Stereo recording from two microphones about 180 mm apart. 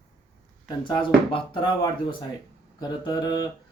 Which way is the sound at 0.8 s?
25° left (ahead or behind).